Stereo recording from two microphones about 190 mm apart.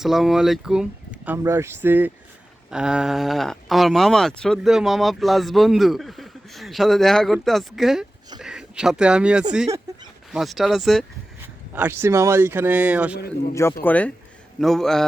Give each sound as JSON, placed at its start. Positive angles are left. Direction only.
{"t": 0.0, "sound": "speech", "side_deg": 0}
{"t": 9.6, "sound": "a sound", "side_deg": -15}
{"t": 10.3, "sound": "speech", "side_deg": 0}
{"t": 11.7, "sound": "speech", "side_deg": -10}
{"t": 13.5, "sound": "speech", "side_deg": 15}